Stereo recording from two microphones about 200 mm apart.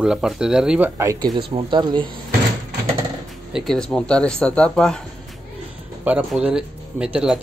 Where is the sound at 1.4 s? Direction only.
25° right (ahead or behind).